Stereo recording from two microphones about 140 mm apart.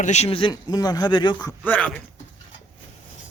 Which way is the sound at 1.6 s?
10° left (ahead or behind).